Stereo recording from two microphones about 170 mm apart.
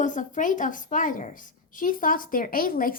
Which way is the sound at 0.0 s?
50° left (ahead or behind).